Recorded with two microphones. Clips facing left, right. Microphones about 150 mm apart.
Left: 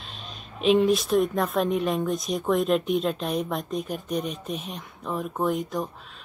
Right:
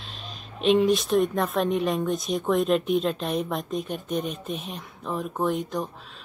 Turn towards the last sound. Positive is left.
turn(degrees=0)  # may be behind; listen again after turning